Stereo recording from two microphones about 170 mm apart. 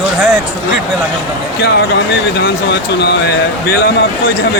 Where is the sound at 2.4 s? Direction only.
80° left.